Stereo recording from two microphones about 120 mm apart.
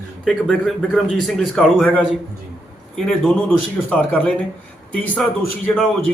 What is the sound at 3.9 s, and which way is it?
A man's voice, 10° left (ahead or behind).